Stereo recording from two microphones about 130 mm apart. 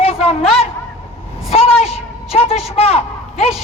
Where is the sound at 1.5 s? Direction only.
50° left (ahead or behind).